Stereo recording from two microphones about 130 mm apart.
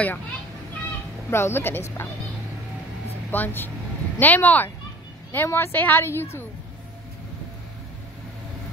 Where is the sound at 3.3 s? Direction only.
15° left (ahead or behind).